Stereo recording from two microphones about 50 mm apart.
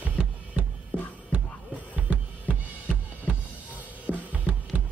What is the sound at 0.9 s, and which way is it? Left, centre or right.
Music, left.